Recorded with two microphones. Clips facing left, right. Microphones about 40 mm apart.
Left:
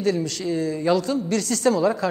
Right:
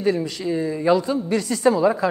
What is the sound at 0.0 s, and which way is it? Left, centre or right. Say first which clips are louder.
A man's voice: right 1 dB; centre.